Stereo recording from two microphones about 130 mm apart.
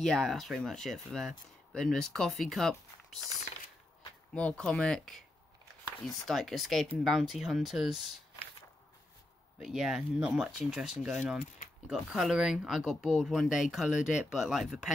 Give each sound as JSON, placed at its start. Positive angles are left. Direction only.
{"t": 0.0, "sound": "speech", "side_deg": 5}
{"t": 4.3, "sound": "speech", "side_deg": 10}
{"t": 9.6, "sound": "speech", "side_deg": -5}